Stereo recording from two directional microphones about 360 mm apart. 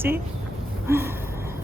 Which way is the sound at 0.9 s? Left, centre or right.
Centre.